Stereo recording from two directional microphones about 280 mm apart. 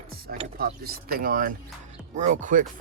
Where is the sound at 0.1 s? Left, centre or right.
Right.